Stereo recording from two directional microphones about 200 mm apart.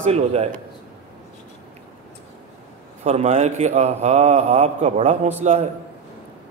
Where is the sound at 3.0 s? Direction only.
35° right (ahead or behind).